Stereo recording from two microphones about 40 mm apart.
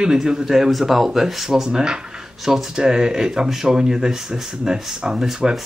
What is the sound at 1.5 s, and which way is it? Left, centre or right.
Speech, centre.